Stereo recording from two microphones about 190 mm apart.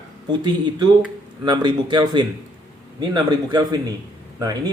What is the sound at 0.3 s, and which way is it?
Speech, 25° right (ahead or behind).